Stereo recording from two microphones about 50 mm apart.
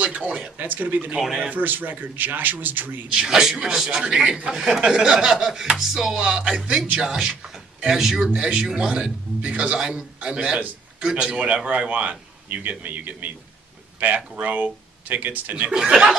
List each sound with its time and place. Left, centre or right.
0.0 s speech: right
3.1 s speech: centre
8.3 s speech: right
15.7 s speech: centre